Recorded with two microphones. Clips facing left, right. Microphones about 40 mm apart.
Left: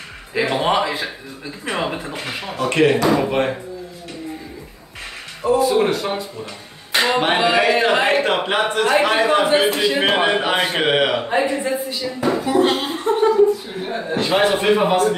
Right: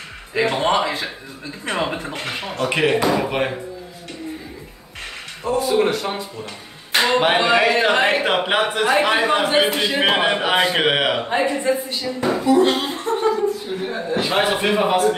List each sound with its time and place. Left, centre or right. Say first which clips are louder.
0.3 s speech: even; centre
5.4 s speech: left 2 dB; centre
6.9 s music: right 1 dB; centre
7.4 s speech: even; centre
12.4 s speech: right 2 dB; left
13.1 s a sound: left 5 dB; centre
14.1 s speech: left 2 dB; centre